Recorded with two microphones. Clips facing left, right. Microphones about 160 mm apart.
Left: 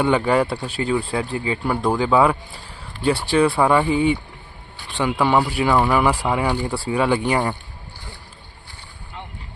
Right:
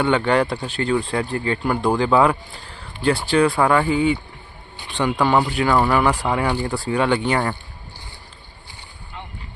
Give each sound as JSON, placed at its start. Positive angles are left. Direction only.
{"t": 0.0, "sound": "speech", "side_deg": 5}
{"t": 3.8, "sound": "speech", "side_deg": 30}
{"t": 4.9, "sound": "speech", "side_deg": 5}